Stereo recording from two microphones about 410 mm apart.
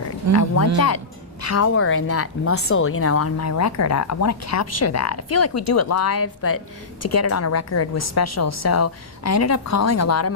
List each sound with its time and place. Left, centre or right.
0.3 s a woman's voice: left